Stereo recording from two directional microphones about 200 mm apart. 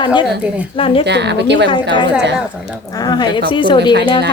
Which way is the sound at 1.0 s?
60° right (ahead or behind).